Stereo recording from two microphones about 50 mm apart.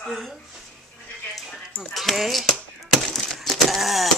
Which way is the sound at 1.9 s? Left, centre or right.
Centre.